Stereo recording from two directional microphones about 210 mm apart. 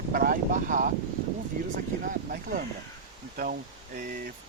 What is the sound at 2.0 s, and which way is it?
Speech, 40° right (ahead or behind).